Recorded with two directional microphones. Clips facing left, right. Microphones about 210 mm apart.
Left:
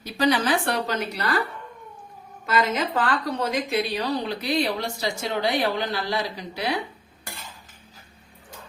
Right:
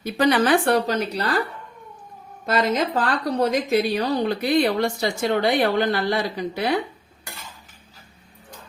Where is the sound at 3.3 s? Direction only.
45° right (ahead or behind).